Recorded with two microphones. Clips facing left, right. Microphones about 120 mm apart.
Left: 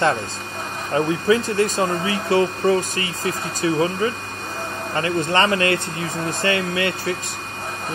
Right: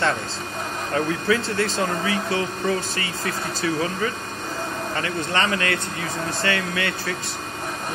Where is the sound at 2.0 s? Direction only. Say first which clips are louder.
Left 5 dB; 30° left (ahead or behind).